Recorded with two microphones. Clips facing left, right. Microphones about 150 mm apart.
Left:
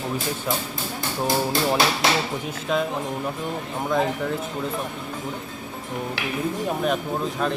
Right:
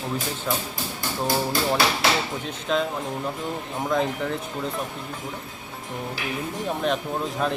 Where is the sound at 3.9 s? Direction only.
Centre (ahead or behind).